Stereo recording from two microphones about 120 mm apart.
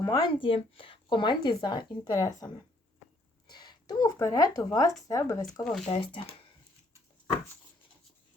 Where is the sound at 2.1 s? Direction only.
30° left (ahead or behind).